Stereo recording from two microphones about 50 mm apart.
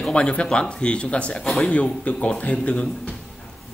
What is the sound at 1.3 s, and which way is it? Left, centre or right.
Speech, centre.